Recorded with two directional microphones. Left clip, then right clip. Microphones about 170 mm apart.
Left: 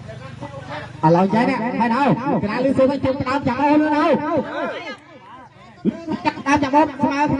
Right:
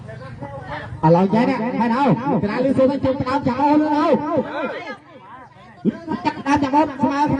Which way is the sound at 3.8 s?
90° right.